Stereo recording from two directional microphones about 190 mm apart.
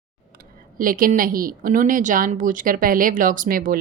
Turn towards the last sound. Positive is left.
turn(degrees=-50)  # may be behind; listen again after turning